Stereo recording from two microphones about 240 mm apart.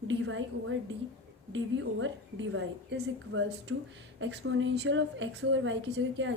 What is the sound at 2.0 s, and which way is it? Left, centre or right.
A woman's voice, right.